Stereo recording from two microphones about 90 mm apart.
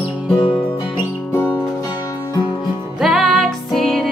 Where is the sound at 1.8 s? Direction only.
40° left (ahead or behind).